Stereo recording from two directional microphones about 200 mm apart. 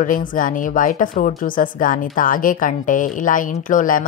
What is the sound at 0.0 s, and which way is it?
Speech, 45° left (ahead or behind).